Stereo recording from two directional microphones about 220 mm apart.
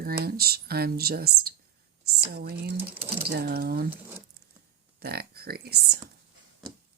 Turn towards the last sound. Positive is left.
turn(degrees=-45)  # may be behind; listen again after turning